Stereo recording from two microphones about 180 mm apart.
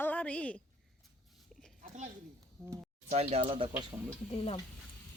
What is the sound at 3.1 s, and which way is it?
Speech, 35° right (ahead or behind).